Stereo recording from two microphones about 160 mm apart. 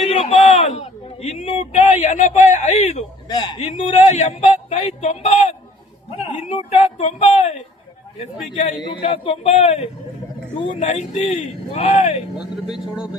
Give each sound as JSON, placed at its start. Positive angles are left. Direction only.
{"t": 0.1, "sound": "a sound", "side_deg": 40}
{"t": 3.8, "sound": "speech", "side_deg": 45}
{"t": 8.8, "sound": "speech", "side_deg": 30}